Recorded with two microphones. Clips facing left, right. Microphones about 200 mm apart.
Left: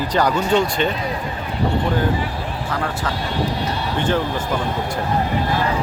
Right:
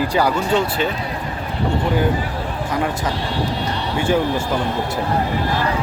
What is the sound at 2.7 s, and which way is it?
Speech, 20° right (ahead or behind).